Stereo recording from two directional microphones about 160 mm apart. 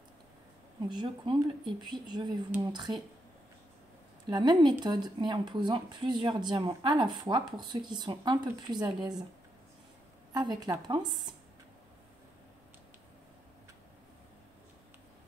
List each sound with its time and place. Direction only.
0.8 s speech: 30° right (ahead or behind)
4.3 s speech: 25° right (ahead or behind)
10.3 s speech: 25° right (ahead or behind)